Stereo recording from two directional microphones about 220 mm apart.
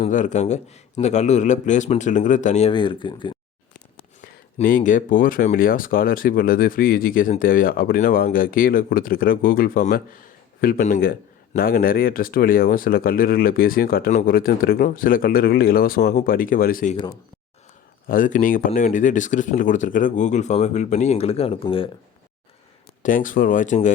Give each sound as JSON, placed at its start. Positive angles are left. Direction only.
{"t": 0.0, "sound": "a man's voice", "side_deg": 35}
{"t": 4.5, "sound": "a man's voice", "side_deg": 35}
{"t": 18.1, "sound": "a man's voice", "side_deg": 35}
{"t": 23.0, "sound": "a man's voice", "side_deg": 35}